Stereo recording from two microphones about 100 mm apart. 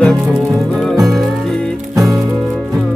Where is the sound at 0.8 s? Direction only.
Centre (ahead or behind).